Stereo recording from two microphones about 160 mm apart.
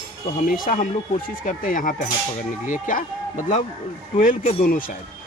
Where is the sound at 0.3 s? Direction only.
60° left (ahead or behind).